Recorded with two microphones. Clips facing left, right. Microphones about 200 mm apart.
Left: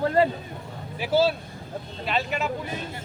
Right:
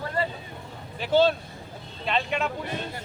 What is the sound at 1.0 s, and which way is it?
Speech, 5° left (ahead or behind).